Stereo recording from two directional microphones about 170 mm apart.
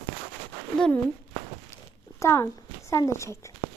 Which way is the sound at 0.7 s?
5° left (ahead or behind).